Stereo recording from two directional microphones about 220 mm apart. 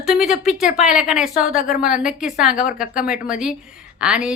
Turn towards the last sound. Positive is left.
turn(degrees=-5)  # may be behind; listen again after turning